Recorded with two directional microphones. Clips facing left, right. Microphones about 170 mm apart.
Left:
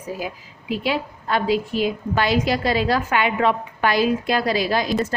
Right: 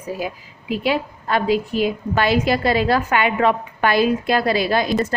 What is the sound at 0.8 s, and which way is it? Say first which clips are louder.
A woman's voice: right 4 dB; 55° right (ahead or behind).